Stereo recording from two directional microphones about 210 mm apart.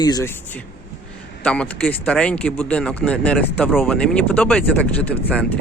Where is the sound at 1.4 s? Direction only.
5° left (ahead or behind).